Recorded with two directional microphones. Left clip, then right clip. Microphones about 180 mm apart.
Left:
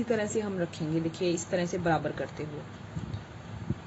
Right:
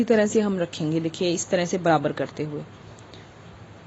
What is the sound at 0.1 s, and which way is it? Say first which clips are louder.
A woman's voice: right 9 dB; 70° right (ahead or behind).